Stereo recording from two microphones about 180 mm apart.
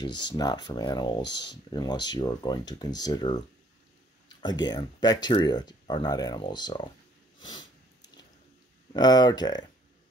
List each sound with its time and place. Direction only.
0.0 s speech: 25° left (ahead or behind)
7.3 s snort: 25° left (ahead or behind)
8.9 s speech: 25° left (ahead or behind)